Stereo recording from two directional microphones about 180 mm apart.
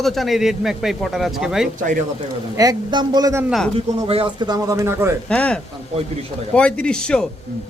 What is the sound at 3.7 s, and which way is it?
A man's voice, 30° right (ahead or behind).